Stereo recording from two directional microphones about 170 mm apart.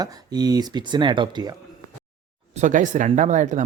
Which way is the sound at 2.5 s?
45° right (ahead or behind).